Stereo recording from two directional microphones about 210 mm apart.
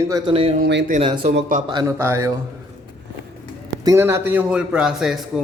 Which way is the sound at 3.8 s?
10° right (ahead or behind).